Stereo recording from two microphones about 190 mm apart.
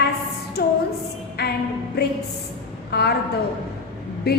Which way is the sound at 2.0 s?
55° left (ahead or behind).